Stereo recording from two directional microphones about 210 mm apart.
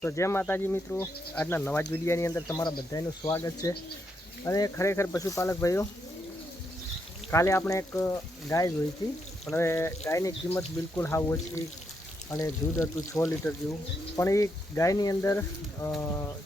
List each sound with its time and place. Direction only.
0.0 s speech: 10° left (ahead or behind)
7.3 s speech: 15° left (ahead or behind)